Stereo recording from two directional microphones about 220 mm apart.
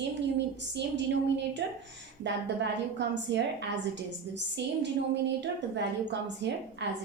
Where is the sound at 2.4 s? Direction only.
50° right (ahead or behind).